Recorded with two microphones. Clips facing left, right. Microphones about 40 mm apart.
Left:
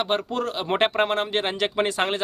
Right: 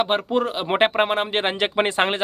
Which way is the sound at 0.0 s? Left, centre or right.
Centre.